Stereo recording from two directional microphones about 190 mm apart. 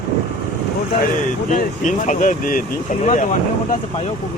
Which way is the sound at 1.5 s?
40° left (ahead or behind).